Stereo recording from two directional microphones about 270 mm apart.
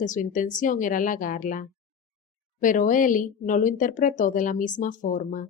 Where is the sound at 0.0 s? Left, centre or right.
Left.